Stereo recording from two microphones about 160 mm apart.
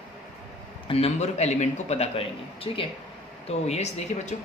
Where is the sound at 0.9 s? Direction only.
40° left (ahead or behind).